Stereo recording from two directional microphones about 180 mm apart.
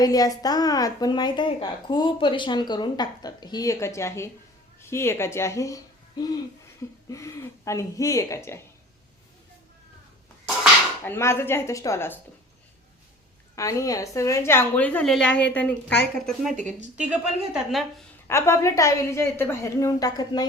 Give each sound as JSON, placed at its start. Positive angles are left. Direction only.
{"t": 0.0, "sound": "a woman's voice", "side_deg": 20}
{"t": 11.0, "sound": "a woman's voice", "side_deg": 15}
{"t": 13.6, "sound": "a woman's voice", "side_deg": 20}
{"t": 18.3, "sound": "a woman's voice", "side_deg": 15}